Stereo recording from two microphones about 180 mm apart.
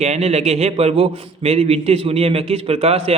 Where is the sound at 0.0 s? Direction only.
35° right (ahead or behind).